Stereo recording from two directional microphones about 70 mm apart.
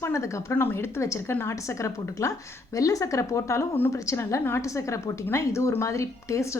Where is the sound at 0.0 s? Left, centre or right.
Left.